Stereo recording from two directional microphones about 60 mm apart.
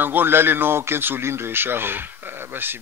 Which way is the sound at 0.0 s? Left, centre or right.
Right.